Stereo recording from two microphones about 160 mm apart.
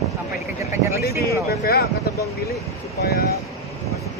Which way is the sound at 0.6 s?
20° right (ahead or behind).